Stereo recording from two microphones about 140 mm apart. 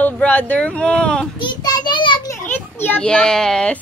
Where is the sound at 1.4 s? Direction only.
30° left (ahead or behind).